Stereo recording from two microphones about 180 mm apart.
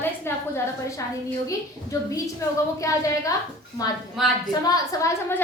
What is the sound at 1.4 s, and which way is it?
A woman's voice, 20° left (ahead or behind).